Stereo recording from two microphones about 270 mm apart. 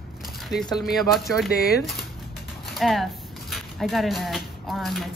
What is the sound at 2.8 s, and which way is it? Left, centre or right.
Speech, centre.